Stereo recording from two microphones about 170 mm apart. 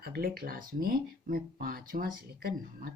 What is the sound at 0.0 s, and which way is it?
Speech, 65° right (ahead or behind).